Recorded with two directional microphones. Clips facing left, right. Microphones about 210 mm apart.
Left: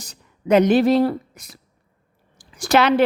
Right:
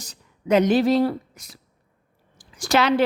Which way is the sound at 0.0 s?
55° left (ahead or behind).